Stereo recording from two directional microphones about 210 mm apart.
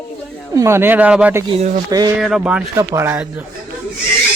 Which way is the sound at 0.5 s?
15° right (ahead or behind).